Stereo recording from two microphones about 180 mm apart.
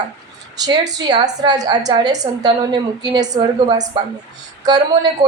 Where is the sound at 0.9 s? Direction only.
20° right (ahead or behind).